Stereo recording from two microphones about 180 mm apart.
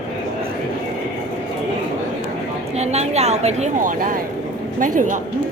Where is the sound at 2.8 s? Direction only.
40° right (ahead or behind).